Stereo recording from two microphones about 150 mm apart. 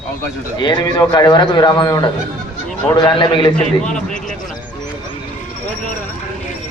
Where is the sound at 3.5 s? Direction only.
5° left (ahead or behind).